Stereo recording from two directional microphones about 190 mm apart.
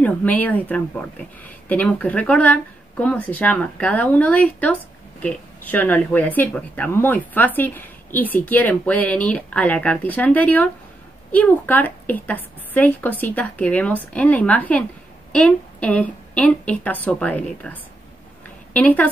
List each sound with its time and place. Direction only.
0.0 s speech: 10° left (ahead or behind)